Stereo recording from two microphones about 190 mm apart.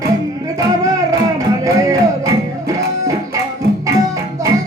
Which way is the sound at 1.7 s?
15° right (ahead or behind).